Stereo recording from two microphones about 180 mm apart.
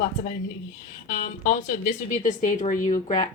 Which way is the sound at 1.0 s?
45° left (ahead or behind).